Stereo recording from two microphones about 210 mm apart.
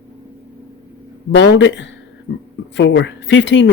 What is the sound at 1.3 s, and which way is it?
Speech, 60° left (ahead or behind).